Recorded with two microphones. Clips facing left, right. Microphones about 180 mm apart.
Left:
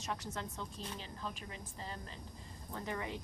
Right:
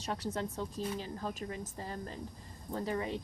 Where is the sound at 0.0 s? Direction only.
35° right (ahead or behind).